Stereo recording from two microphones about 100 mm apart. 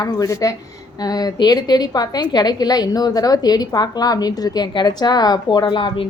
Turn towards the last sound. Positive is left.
turn(degrees=55)  # may be behind; listen again after turning